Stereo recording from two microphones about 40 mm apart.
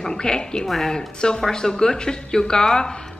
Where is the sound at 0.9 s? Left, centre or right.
Left.